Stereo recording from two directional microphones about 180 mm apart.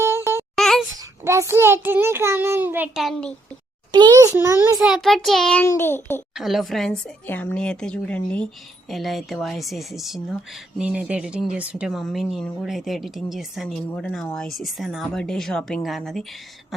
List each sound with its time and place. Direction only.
0.0 s music: 15° right (ahead or behind)
0.5 s a sound: centre (ahead or behind)
1.2 s a child's voice: 15° right (ahead or behind); by 3.3 s centre (ahead or behind)
3.9 s a child's voice: 20° right (ahead or behind)
4.8 s speech: centre (ahead or behind)
5.6 s a sound: 15° left (ahead or behind)
6.3 s speech: centre (ahead or behind)